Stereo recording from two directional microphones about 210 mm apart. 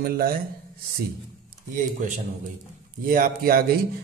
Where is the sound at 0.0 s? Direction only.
45° right (ahead or behind).